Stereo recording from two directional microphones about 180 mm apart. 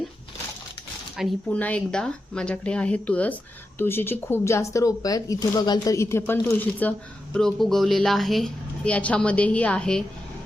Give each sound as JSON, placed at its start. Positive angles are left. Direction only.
{"t": 1.1, "sound": "a woman's voice", "side_deg": 0}